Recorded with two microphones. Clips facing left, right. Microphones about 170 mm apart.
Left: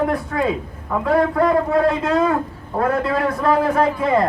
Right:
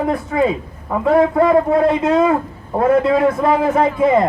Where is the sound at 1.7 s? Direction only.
25° right (ahead or behind).